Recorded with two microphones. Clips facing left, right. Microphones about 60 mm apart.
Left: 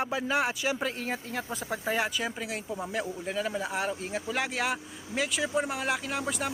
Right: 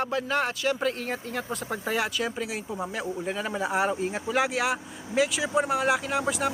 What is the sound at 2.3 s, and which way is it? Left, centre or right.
Speech, centre.